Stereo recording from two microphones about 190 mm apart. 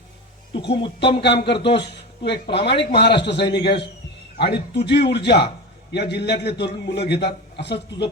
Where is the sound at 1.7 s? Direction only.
60° left (ahead or behind).